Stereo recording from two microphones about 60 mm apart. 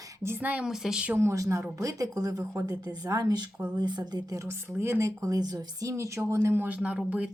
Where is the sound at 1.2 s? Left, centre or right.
Right.